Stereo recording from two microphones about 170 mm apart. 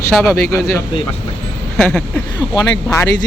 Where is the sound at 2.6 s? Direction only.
20° left (ahead or behind).